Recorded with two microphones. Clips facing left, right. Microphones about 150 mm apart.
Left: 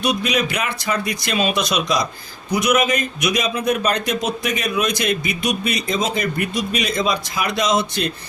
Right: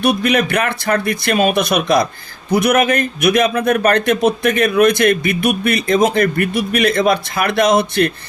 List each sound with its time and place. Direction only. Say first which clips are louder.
0.0 s a man's voice: right 5 dB; 55° right (ahead or behind)